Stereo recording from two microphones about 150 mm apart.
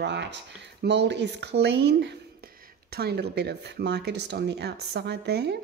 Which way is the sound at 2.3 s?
75° right (ahead or behind).